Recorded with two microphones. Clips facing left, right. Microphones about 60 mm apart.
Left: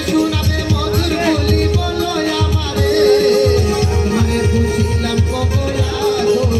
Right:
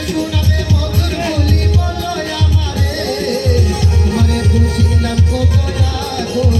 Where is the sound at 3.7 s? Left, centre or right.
Left.